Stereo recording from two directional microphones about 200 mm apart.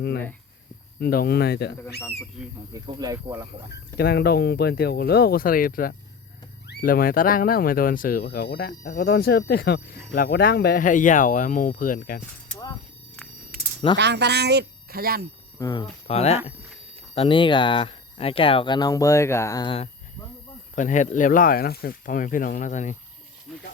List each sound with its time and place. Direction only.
0.9 s speech: 50° left (ahead or behind)
2.0 s speech: 10° left (ahead or behind)
2.7 s speech: 20° right (ahead or behind)
3.9 s speech: 50° left (ahead or behind)
13.9 s speech: 60° right (ahead or behind)
15.5 s speech: 20° left (ahead or behind)
20.7 s speech: 40° left (ahead or behind)
23.5 s speech: centre (ahead or behind)